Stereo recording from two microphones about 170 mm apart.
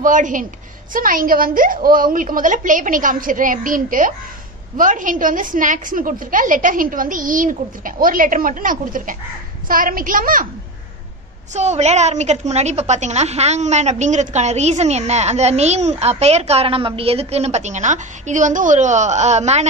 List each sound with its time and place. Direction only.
0.0 s a woman's voice: 50° right (ahead or behind)
11.5 s a woman's voice: 40° right (ahead or behind)